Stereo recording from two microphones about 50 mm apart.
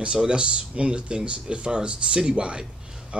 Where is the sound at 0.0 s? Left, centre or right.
Centre.